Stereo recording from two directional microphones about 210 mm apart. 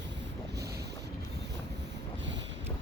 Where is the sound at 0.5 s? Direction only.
50° right (ahead or behind).